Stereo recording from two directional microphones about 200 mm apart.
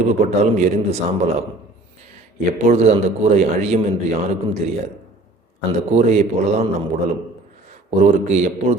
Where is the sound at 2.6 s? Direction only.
35° right (ahead or behind).